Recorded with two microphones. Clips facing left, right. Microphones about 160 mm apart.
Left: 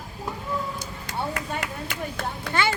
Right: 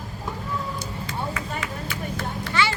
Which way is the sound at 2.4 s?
55° left (ahead or behind).